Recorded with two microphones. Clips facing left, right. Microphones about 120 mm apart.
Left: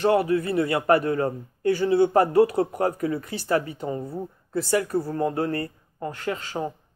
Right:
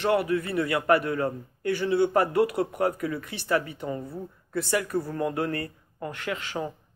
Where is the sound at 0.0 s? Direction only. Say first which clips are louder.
Left 4 dB; 35° left (ahead or behind).